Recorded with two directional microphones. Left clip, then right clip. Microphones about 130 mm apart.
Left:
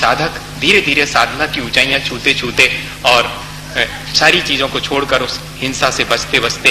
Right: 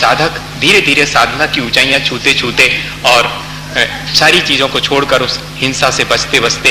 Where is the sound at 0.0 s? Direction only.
25° left (ahead or behind).